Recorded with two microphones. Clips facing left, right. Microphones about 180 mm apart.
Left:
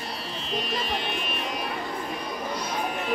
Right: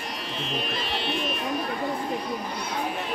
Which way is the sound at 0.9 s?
45° left (ahead or behind).